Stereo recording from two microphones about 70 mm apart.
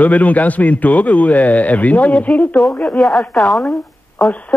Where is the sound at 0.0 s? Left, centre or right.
Left.